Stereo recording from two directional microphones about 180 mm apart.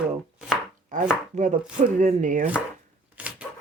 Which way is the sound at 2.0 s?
45° right (ahead or behind).